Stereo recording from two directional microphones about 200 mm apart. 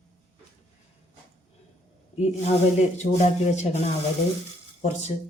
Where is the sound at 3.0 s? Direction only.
35° left (ahead or behind).